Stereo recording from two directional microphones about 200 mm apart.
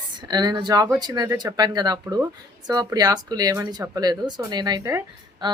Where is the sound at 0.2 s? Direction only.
20° right (ahead or behind).